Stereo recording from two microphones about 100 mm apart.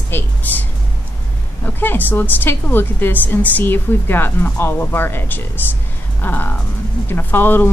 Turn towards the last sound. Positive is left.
turn(degrees=20)  # may be behind; listen again after turning